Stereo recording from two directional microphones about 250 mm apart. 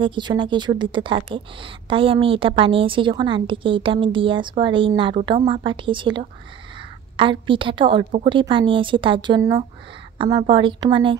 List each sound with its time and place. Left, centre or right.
0.0 s a woman's voice: centre